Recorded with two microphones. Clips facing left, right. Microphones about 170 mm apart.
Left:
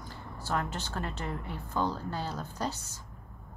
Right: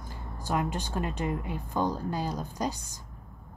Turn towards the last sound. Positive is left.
turn(degrees=-15)  # may be behind; listen again after turning